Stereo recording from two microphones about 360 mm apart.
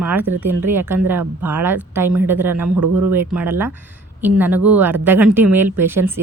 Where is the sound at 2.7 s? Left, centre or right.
Right.